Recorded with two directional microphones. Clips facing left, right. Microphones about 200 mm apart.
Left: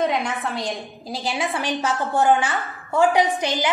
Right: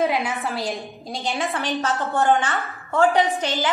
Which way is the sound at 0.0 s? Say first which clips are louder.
Even; 5° right (ahead or behind).